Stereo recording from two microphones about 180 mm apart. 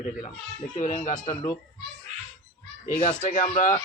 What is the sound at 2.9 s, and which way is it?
Speech, 45° left (ahead or behind).